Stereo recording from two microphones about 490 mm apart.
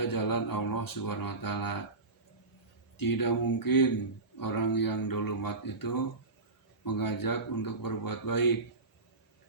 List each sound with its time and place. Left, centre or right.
0.0 s speech: left
3.0 s speech: left